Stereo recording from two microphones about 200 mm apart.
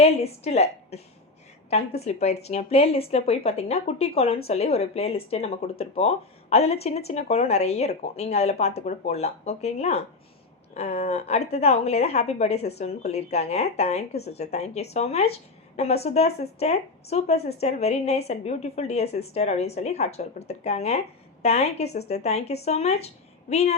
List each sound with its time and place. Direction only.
0.0 s speech: 30° left (ahead or behind)